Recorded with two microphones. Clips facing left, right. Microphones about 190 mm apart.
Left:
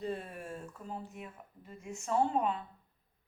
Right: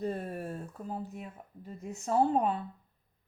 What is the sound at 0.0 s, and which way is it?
Speech, 45° right (ahead or behind).